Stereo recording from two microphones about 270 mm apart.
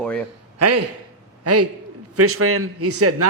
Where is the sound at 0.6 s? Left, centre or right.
Right.